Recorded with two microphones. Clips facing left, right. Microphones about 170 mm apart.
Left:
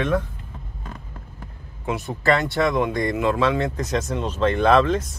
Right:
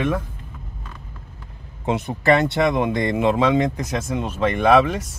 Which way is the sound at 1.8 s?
20° right (ahead or behind).